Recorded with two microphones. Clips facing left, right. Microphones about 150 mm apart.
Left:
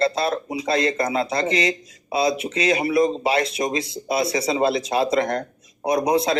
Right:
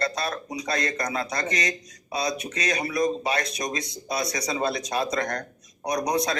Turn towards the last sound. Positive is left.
turn(degrees=25)  # may be behind; listen again after turning